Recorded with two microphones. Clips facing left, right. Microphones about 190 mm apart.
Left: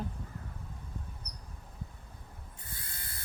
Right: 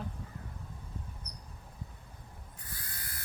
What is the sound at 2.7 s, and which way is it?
Ratchet, 25° left (ahead or behind).